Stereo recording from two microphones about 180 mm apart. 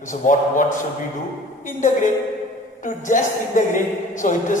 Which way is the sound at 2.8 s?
45° left (ahead or behind).